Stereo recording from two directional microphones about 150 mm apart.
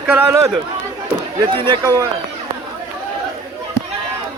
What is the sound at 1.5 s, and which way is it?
Speech, 35° right (ahead or behind).